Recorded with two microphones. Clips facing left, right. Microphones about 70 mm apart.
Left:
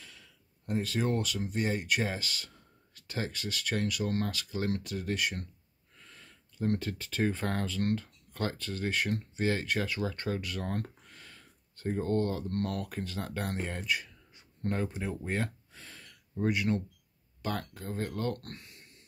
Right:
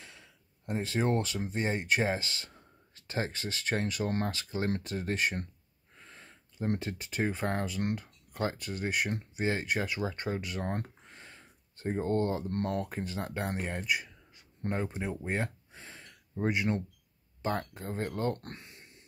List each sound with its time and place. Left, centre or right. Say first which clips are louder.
0.0 s speech: right 1 dB; right